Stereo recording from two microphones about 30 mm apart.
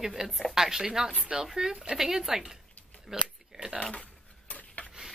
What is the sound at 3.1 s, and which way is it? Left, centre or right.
Speech, centre.